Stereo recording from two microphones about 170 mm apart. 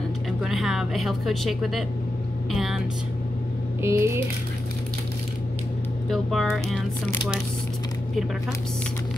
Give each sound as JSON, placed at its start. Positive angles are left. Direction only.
{"t": 0.4, "sound": "speech", "side_deg": 0}
{"t": 3.8, "sound": "speech", "side_deg": -15}
{"t": 6.0, "sound": "speech", "side_deg": 0}